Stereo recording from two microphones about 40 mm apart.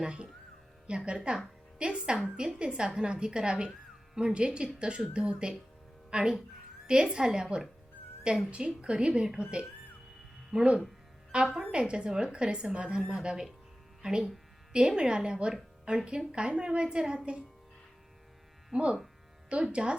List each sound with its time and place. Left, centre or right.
0.0 s a woman's voice: right
8.4 s a woman's voice: right
18.7 s a woman's voice: right